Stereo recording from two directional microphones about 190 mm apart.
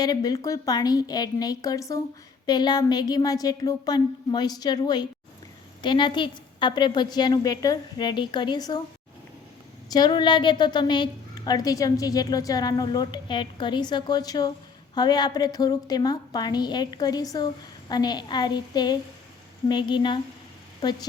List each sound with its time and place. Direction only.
0.0 s a woman's voice: 20° left (ahead or behind)
9.9 s a woman's voice: 25° left (ahead or behind)